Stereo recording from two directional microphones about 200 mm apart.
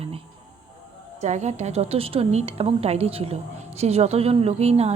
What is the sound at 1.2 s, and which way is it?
A woman's voice, 35° right (ahead or behind).